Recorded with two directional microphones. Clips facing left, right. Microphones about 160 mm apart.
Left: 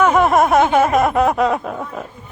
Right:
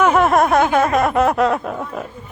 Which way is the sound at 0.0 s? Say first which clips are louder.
Left 1 dB; centre (ahead or behind).